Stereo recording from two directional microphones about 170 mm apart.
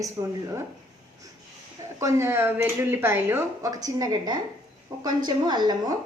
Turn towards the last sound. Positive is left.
turn(degrees=-25)  # may be behind; listen again after turning